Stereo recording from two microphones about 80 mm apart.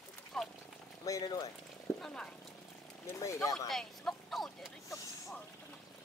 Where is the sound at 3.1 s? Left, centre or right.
Left.